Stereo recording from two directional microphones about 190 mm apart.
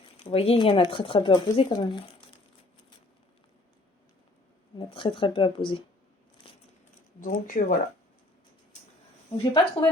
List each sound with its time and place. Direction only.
0.3 s speech: 30° left (ahead or behind)
4.9 s speech: 25° left (ahead or behind)
7.4 s speech: 45° left (ahead or behind)
9.4 s speech: 25° left (ahead or behind)